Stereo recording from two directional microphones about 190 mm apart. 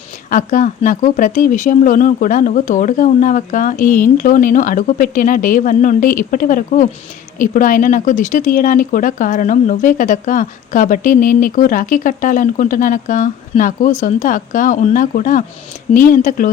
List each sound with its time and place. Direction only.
0.3 s speech: 45° left (ahead or behind)